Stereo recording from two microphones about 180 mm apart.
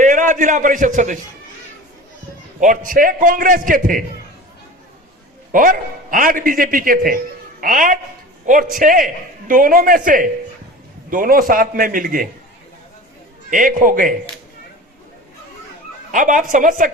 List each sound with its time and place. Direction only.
0.0 s a man's voice: 45° right (ahead or behind)
2.6 s a man's voice: 45° right (ahead or behind)
5.5 s a man's voice: 50° right (ahead or behind)
13.5 s a man's voice: 45° right (ahead or behind)
16.1 s a man's voice: 50° right (ahead or behind)